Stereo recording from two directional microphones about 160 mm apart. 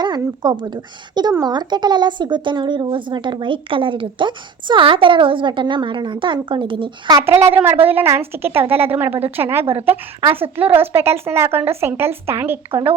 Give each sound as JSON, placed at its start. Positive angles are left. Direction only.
{"t": 0.0, "sound": "speech", "side_deg": -25}
{"t": 7.4, "sound": "speech", "side_deg": -15}
{"t": 12.7, "sound": "speech", "side_deg": -35}